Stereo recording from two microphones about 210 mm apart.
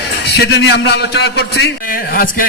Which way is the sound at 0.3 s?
50° left (ahead or behind).